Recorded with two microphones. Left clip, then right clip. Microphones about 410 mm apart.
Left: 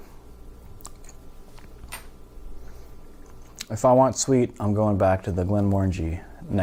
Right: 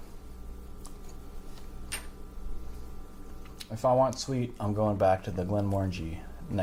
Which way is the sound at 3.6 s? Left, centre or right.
Left.